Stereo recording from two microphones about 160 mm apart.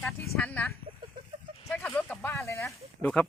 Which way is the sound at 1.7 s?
10° left (ahead or behind).